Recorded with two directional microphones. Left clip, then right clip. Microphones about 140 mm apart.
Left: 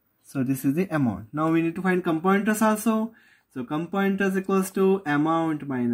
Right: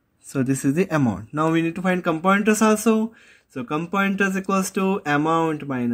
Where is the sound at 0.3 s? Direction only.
25° right (ahead or behind).